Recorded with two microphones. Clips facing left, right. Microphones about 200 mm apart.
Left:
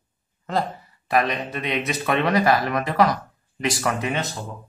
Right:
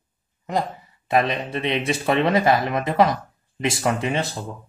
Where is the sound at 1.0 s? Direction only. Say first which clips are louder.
Right 1 dB; 25° right (ahead or behind).